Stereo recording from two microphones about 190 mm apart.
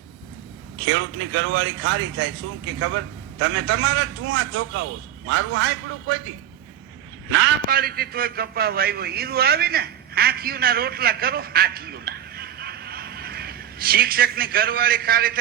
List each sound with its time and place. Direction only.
0.9 s a man's voice: 90° right
7.7 s a man's voice: 50° right (ahead or behind)